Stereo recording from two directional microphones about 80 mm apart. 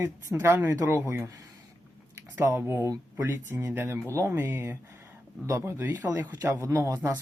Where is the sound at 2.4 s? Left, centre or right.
Right.